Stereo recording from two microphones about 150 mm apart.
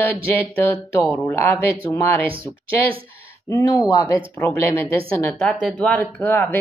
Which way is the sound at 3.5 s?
20° left (ahead or behind).